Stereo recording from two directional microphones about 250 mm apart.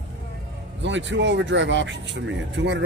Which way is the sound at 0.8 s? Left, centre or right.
Right.